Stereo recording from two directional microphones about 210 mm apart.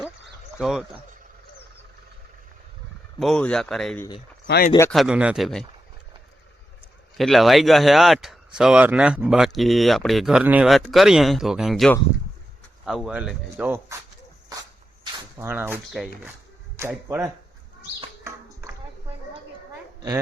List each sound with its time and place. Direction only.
0.6 s speech: centre (ahead or behind)
3.2 s speech: centre (ahead or behind)
4.4 s speech: 50° left (ahead or behind)
4.9 s speech: centre (ahead or behind)
7.2 s speech: centre (ahead or behind)
15.4 s speech: 10° right (ahead or behind)
18.2 s a sound: 15° right (ahead or behind)
20.0 s speech: 15° right (ahead or behind)